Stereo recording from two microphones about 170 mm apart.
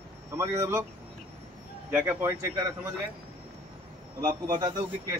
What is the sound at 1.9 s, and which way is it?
Speech, 10° right (ahead or behind).